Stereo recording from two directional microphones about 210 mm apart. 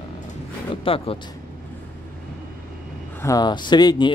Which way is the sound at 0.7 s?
25° left (ahead or behind).